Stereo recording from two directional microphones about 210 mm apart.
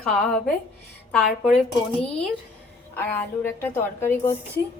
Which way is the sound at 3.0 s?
10° left (ahead or behind).